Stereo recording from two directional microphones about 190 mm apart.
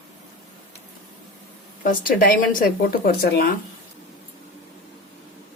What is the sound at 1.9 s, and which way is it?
Speech, 50° left (ahead or behind).